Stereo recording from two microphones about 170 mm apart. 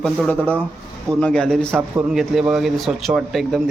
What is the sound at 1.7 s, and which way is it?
Speech, 10° right (ahead or behind).